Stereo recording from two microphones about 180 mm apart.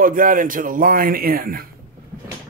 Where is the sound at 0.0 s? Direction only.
50° right (ahead or behind).